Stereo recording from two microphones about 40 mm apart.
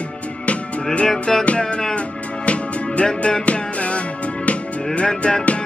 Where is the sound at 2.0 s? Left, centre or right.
Left.